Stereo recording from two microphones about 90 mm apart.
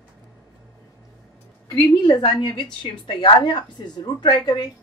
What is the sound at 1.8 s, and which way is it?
A woman's voice, 50° left (ahead or behind).